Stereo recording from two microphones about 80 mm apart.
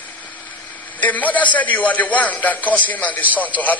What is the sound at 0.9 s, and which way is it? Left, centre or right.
A man's voice, centre.